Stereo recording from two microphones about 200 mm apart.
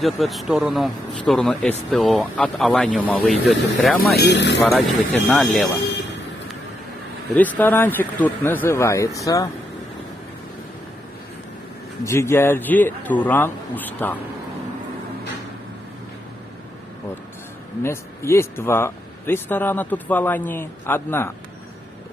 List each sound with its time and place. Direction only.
0.0 s speech: centre (ahead or behind)
4.1 s speech: 55° left (ahead or behind)
4.6 s speech: centre (ahead or behind)
7.3 s speech: 10° left (ahead or behind)
12.0 s speech: 15° left (ahead or behind)
17.8 s speech: 15° left (ahead or behind)